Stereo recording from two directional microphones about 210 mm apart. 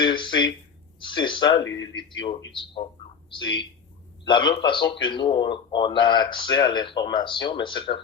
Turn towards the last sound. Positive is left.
turn(degrees=20)  # may be behind; listen again after turning